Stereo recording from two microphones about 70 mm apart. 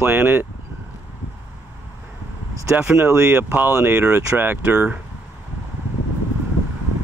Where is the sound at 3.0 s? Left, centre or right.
Right.